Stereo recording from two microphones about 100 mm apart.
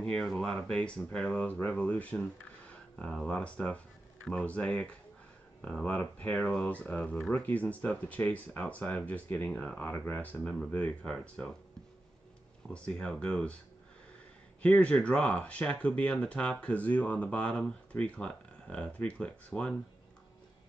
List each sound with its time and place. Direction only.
0.0 s speech: 5° left (ahead or behind)
12.7 s speech: 10° left (ahead or behind)
14.6 s speech: 15° left (ahead or behind)